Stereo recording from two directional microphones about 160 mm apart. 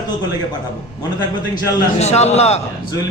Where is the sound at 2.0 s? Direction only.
45° left (ahead or behind).